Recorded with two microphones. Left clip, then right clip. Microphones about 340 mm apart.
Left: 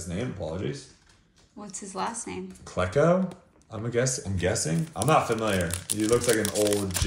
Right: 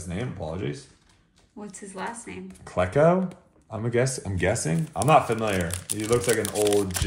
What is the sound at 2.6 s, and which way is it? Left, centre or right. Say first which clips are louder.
A man's voice: right 3 dB; right.